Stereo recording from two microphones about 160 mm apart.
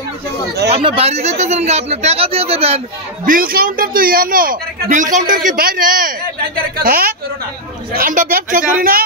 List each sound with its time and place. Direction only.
0.7 s speech: 35° right (ahead or behind)
3.3 s a woman's voice: 60° right (ahead or behind)